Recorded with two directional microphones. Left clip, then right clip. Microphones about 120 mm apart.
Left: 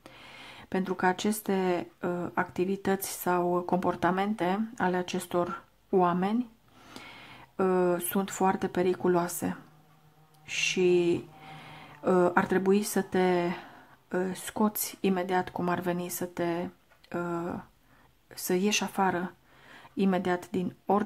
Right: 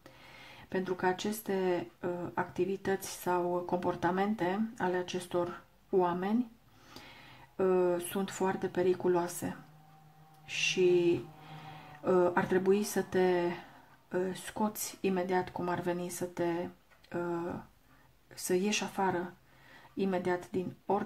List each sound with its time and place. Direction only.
0.0 s speech: 30° left (ahead or behind)